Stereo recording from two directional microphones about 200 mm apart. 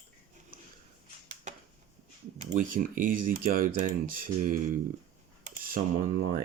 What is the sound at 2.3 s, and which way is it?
Speech, 40° right (ahead or behind).